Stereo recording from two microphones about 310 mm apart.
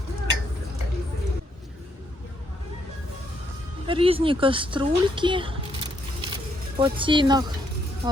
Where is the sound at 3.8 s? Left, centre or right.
Centre.